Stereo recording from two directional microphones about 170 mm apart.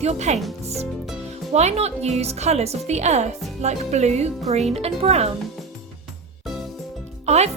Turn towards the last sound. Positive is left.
turn(degrees=-40)  # may be behind; listen again after turning